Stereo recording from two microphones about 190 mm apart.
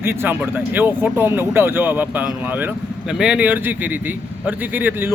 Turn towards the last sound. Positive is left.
turn(degrees=-10)  # may be behind; listen again after turning